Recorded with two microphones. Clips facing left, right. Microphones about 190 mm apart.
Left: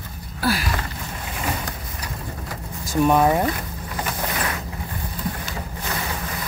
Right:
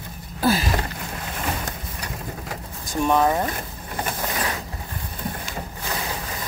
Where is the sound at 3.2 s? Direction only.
15° left (ahead or behind).